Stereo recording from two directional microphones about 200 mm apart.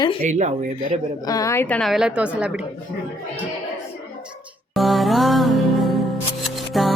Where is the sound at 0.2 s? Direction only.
35° right (ahead or behind).